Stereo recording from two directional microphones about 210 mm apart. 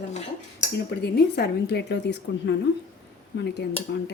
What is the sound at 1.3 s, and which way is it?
Speech, 50° left (ahead or behind).